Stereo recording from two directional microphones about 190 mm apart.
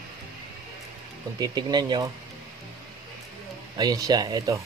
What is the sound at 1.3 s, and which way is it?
Speech, 20° right (ahead or behind).